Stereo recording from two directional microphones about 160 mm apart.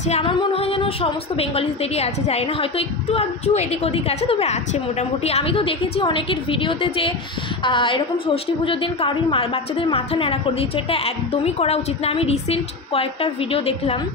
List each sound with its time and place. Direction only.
0.1 s a woman's voice: 35° left (ahead or behind)